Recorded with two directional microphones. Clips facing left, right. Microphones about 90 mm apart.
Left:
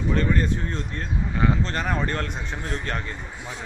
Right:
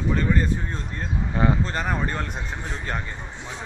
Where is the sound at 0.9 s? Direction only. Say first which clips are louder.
Right 1 dB; 25° right (ahead or behind).